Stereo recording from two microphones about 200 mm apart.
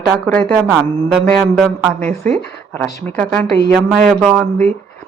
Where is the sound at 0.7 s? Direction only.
5° right (ahead or behind).